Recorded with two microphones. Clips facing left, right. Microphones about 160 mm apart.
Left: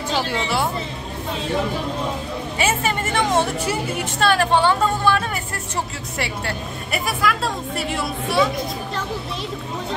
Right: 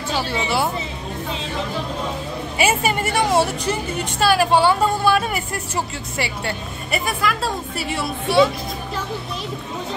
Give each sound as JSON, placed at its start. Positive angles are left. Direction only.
{"t": 0.2, "sound": "a woman's voice", "side_deg": -10}
{"t": 2.5, "sound": "a woman's voice", "side_deg": -10}
{"t": 6.1, "sound": "a woman's voice", "side_deg": 0}